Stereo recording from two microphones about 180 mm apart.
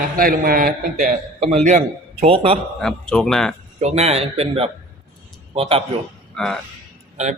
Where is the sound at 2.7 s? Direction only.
5° left (ahead or behind).